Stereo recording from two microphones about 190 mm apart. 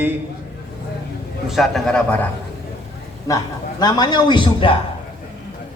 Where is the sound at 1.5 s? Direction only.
Centre (ahead or behind).